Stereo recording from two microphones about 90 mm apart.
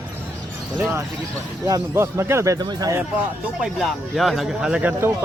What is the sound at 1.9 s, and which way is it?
Speech, 30° right (ahead or behind).